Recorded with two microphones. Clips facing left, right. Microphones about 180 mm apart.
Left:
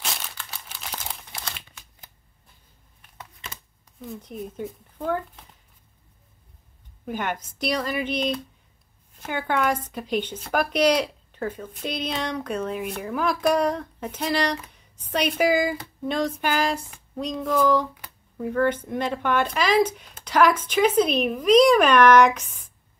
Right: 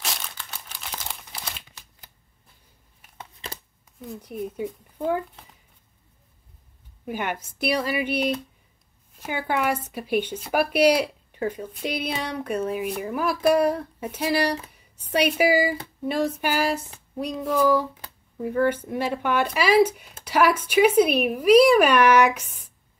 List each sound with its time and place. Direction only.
0.0 s crumpling: centre (ahead or behind)
3.2 s a sound: 30° right (ahead or behind)
4.2 s speech: 10° right (ahead or behind)
7.1 s speech: 10° right (ahead or behind)